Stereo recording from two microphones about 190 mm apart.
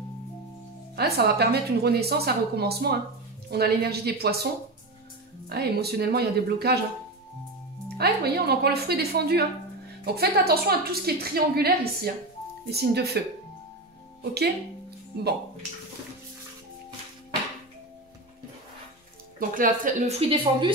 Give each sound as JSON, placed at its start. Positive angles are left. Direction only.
{"t": 0.9, "sound": "a woman's voice", "side_deg": -55}
{"t": 5.5, "sound": "a woman's voice", "side_deg": -55}
{"t": 8.0, "sound": "a woman's voice", "side_deg": -55}
{"t": 19.5, "sound": "speech", "side_deg": -45}